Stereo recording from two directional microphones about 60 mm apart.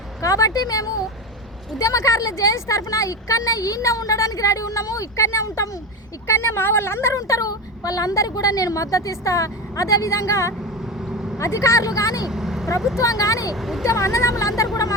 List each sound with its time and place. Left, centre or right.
0.2 s speech: left
1.8 s a woman's voice: left
6.2 s speech: left
7.2 s speech: left
11.0 s vehicle: centre
11.3 s a woman's voice: left
12.2 s vehicle: centre
13.0 s speech: left
13.5 s speech: centre
13.8 s a woman's voice: left